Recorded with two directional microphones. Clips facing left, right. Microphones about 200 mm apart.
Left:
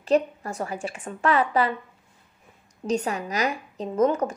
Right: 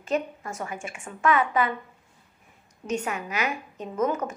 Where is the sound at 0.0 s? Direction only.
35° left (ahead or behind).